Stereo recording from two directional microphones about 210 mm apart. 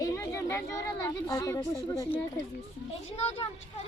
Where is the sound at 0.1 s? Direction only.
15° left (ahead or behind).